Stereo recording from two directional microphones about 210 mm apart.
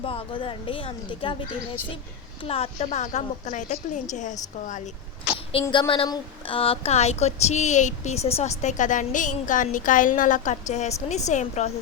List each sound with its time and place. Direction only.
0.0 s speech: 25° left (ahead or behind)
2.4 s speech: 30° left (ahead or behind)
5.6 s a sound: 15° left (ahead or behind)
5.9 s speech: 25° left (ahead or behind)